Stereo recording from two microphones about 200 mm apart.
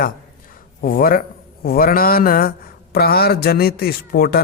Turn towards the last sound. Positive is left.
turn(degrees=50)  # may be behind; listen again after turning